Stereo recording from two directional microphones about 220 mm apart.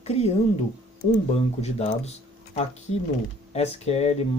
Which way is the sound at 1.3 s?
30° left (ahead or behind).